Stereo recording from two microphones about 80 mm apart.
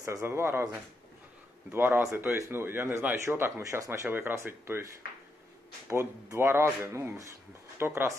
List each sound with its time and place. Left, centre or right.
0.0 s speech: right
4.1 s speech: right
6.3 s speech: right